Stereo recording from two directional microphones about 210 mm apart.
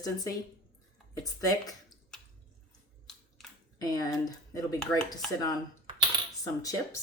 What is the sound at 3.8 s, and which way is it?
Speech, 15° left (ahead or behind).